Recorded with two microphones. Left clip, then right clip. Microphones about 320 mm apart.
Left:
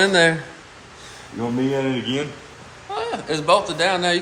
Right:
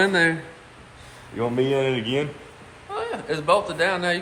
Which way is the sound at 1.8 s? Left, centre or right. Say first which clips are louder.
Even; right.